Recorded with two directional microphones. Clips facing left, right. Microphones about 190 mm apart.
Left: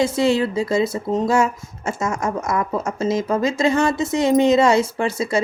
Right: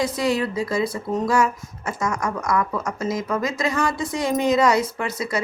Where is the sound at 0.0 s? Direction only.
25° left (ahead or behind).